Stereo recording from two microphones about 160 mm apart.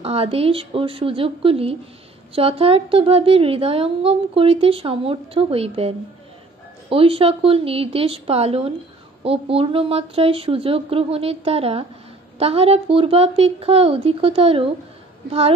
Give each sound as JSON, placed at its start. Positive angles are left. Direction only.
{"t": 0.0, "sound": "a woman's voice", "side_deg": -35}